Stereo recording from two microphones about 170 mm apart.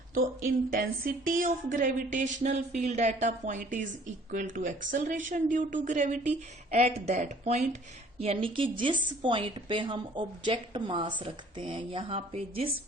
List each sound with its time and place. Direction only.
0.1 s a woman's voice: 55° right (ahead or behind); by 12.7 s 35° right (ahead or behind)